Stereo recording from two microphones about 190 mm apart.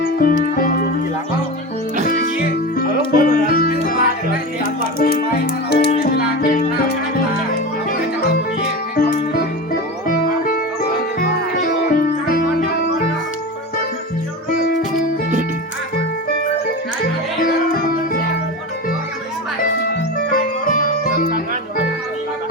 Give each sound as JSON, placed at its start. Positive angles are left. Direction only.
{"t": 0.2, "sound": "music", "side_deg": 45}
{"t": 2.0, "sound": "music", "side_deg": 50}
{"t": 9.0, "sound": "music", "side_deg": 50}
{"t": 11.6, "sound": "music", "side_deg": 50}
{"t": 17.4, "sound": "music", "side_deg": 50}
{"t": 20.3, "sound": "music", "side_deg": 45}